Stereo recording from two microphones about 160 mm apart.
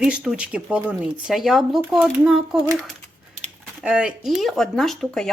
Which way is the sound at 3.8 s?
5° right (ahead or behind).